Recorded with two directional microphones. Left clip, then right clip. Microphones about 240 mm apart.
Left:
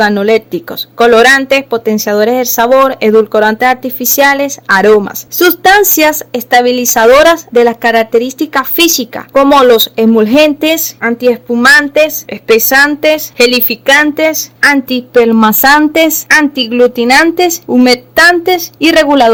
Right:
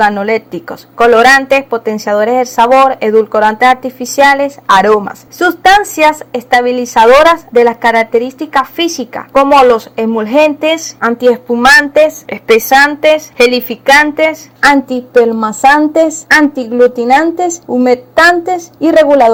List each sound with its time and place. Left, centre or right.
0.0 s speech: left
11.0 s a woman's voice: centre